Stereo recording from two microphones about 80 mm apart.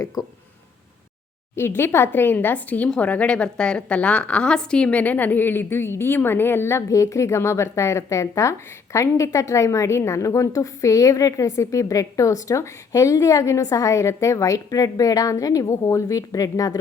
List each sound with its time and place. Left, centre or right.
0.0 s speech: left
1.5 s a woman's voice: left